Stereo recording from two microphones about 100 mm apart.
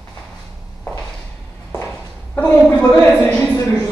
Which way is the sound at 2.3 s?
20° left (ahead or behind).